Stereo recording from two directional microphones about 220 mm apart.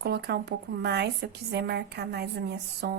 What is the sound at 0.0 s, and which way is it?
A woman's voice, 45° right (ahead or behind).